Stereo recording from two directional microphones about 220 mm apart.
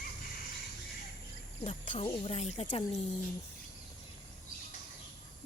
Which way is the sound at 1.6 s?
25° left (ahead or behind).